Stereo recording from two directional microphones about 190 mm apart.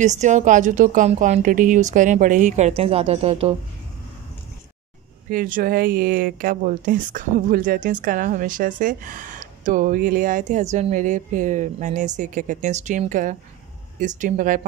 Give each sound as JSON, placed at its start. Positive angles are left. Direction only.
{"t": 0.0, "sound": "a woman's voice", "side_deg": -40}
{"t": 5.3, "sound": "speech", "side_deg": -50}